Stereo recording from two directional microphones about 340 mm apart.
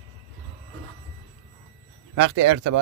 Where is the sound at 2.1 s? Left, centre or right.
Right.